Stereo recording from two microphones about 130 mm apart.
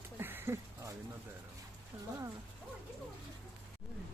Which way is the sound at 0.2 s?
15° right (ahead or behind).